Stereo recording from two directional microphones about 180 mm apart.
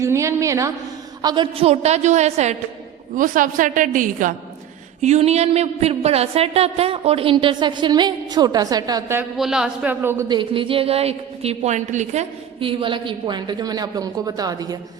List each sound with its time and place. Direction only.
0.0 s a man's voice: 15° right (ahead or behind)
9.4 s a man's voice: 5° right (ahead or behind)
10.2 s a woman's voice: 25° right (ahead or behind)